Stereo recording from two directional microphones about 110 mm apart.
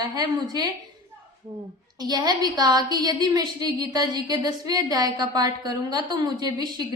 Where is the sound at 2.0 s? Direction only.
35° right (ahead or behind).